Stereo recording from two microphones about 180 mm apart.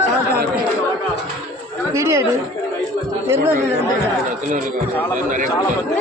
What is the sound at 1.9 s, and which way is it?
Speech, 15° right (ahead or behind).